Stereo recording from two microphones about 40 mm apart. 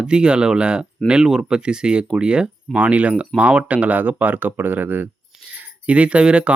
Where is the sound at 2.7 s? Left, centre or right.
Right.